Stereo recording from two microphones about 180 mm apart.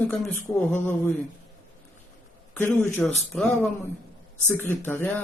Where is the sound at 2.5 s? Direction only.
10° left (ahead or behind).